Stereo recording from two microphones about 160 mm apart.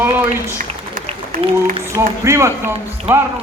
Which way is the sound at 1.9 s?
20° right (ahead or behind).